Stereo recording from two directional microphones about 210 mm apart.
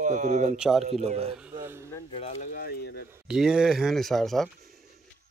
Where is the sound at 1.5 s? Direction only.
10° right (ahead or behind).